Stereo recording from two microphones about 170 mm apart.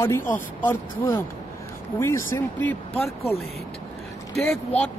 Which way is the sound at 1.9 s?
15° left (ahead or behind).